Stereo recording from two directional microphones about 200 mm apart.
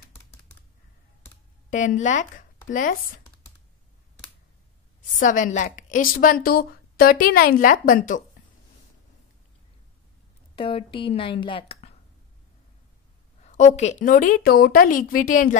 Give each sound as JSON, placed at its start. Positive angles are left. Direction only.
{"t": 1.7, "sound": "speech", "side_deg": 40}
{"t": 5.2, "sound": "a woman's voice", "side_deg": 40}
{"t": 10.5, "sound": "a woman's voice", "side_deg": 25}
{"t": 13.4, "sound": "a woman's voice", "side_deg": 35}